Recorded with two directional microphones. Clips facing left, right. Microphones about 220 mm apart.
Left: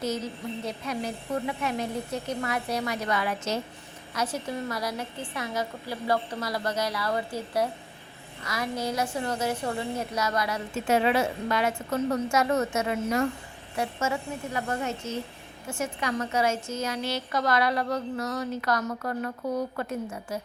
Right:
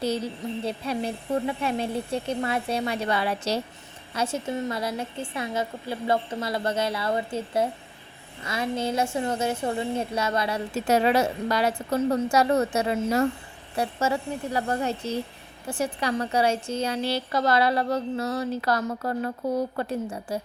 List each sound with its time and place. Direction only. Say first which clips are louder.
0.0 s a woman's voice: right 3 dB; 30° right (ahead or behind)